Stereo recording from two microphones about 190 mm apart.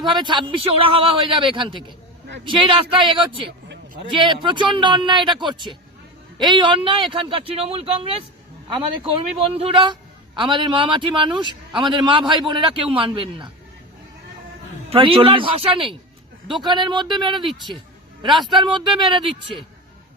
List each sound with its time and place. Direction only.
0.0 s a man's voice: 25° right (ahead or behind)
14.8 s a man's voice: 25° right (ahead or behind)
18.4 s a man's voice: 25° right (ahead or behind)